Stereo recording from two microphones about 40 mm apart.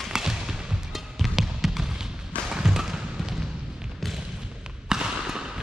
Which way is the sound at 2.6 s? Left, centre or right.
Centre.